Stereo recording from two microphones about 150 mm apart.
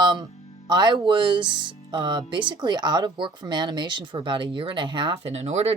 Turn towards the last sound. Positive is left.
turn(degrees=-50)  # may be behind; listen again after turning